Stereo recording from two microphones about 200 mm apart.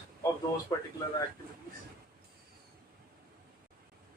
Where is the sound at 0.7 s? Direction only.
15° left (ahead or behind).